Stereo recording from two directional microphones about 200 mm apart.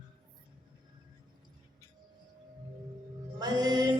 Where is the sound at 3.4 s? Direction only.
20° right (ahead or behind).